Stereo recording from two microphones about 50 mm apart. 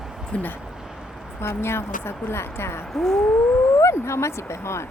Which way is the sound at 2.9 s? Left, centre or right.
Centre.